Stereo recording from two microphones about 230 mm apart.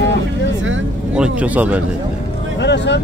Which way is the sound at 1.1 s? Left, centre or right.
Centre.